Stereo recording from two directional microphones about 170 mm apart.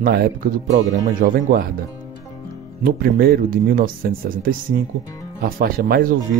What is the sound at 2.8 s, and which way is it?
Speech, 60° right (ahead or behind).